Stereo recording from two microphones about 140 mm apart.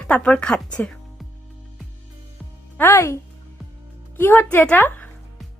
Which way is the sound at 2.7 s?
15° left (ahead or behind).